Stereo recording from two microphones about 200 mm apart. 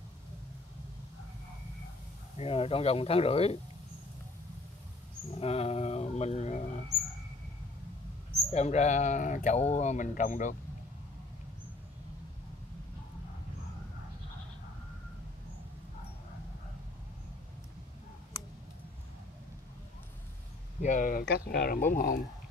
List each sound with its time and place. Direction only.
2.3 s speech: 30° left (ahead or behind)
5.3 s a sound: 30° left (ahead or behind)
8.5 s speech: 35° left (ahead or behind)
20.8 s speech: 40° left (ahead or behind)